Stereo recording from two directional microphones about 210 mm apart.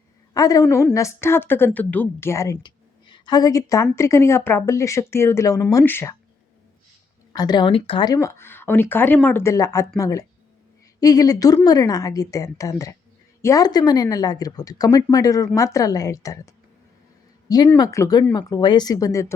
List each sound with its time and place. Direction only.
0.3 s speech: 15° left (ahead or behind)
7.3 s speech: 20° left (ahead or behind)
17.5 s speech: 20° left (ahead or behind)